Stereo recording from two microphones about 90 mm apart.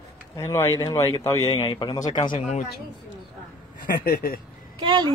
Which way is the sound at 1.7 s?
60° left (ahead or behind).